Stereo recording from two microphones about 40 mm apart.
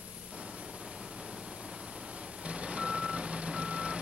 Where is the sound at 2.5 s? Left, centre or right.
Right.